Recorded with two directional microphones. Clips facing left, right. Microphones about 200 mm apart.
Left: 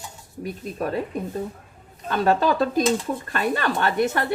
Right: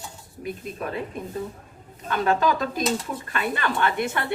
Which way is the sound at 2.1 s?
35° left (ahead or behind).